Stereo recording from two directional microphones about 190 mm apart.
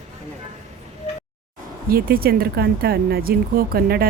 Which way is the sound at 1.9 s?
50° right (ahead or behind).